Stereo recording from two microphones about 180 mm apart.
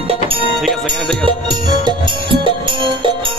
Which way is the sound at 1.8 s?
25° right (ahead or behind).